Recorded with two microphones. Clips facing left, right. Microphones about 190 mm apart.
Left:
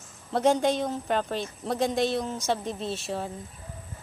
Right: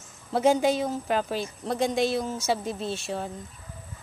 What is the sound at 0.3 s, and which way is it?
Speech, 5° right (ahead or behind).